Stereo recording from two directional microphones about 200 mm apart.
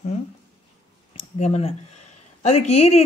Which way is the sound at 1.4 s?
30° left (ahead or behind).